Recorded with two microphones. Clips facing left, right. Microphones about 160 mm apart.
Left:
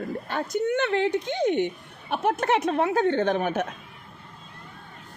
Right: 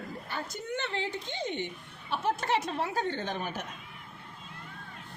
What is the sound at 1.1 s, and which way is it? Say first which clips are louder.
Speech: left 12 dB; 20° left (ahead or behind).